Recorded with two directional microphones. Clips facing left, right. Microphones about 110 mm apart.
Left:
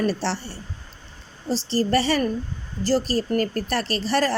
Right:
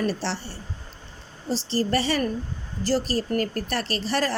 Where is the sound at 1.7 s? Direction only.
35° left (ahead or behind).